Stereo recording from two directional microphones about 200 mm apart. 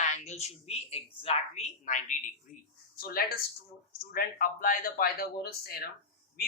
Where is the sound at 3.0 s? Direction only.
50° left (ahead or behind).